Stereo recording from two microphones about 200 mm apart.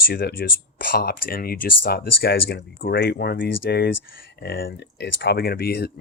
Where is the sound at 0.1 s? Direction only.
50° left (ahead or behind).